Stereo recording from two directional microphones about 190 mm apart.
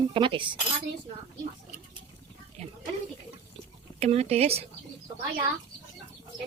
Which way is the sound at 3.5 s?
35° right (ahead or behind).